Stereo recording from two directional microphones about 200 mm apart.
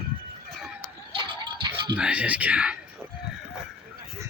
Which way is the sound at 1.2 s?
25° right (ahead or behind).